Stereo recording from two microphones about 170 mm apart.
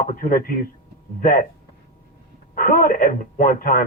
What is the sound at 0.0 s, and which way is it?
Speech, 55° left (ahead or behind).